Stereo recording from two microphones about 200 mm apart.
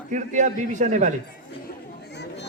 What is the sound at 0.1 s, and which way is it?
A woman's voice, 40° right (ahead or behind).